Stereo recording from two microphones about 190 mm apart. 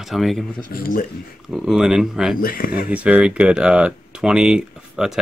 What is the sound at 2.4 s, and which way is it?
Speech, 50° left (ahead or behind).